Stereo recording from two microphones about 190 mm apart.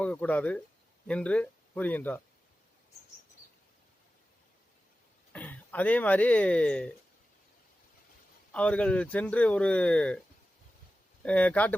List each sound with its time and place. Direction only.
0.0 s speech: 5° left (ahead or behind)
5.3 s speech: 10° left (ahead or behind)
8.5 s speech: 5° left (ahead or behind)
11.2 s speech: 5° left (ahead or behind)